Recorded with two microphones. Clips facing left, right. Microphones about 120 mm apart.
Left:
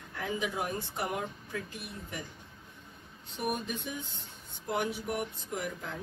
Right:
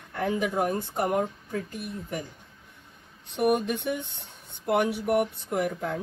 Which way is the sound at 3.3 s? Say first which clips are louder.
Right 10 dB; 75° right (ahead or behind).